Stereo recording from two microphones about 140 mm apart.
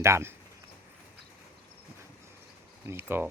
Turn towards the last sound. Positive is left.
turn(degrees=-15)  # may be behind; listen again after turning